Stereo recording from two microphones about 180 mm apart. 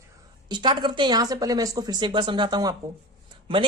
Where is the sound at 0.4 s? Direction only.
25° right (ahead or behind).